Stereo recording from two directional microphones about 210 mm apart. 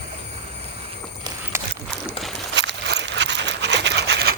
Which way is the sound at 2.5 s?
55° right (ahead or behind).